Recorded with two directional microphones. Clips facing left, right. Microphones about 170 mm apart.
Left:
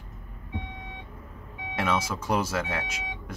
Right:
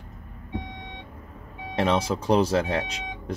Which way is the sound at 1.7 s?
35° right (ahead or behind).